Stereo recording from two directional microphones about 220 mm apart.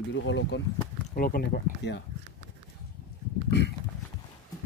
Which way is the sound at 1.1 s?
40° left (ahead or behind).